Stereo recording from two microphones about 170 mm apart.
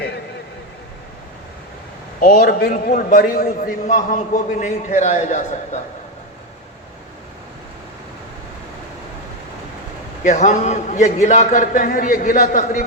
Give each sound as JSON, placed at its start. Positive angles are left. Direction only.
{"t": 2.2, "sound": "a man's voice", "side_deg": 60}
{"t": 3.8, "sound": "a man's voice", "side_deg": 50}
{"t": 10.2, "sound": "a man's voice", "side_deg": 45}